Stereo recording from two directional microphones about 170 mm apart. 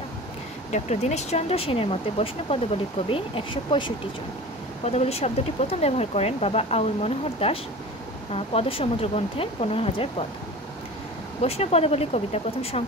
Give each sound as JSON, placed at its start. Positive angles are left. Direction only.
{"t": 0.7, "sound": "speech", "side_deg": 45}
{"t": 11.4, "sound": "speech", "side_deg": 35}